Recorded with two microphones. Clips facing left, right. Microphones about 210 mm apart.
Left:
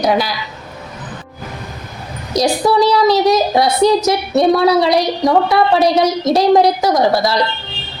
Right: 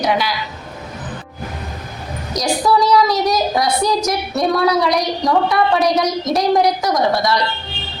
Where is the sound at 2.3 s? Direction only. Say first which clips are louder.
Left 3 dB; 30° left (ahead or behind).